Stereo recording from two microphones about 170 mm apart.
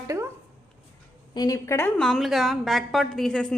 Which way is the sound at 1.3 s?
20° left (ahead or behind).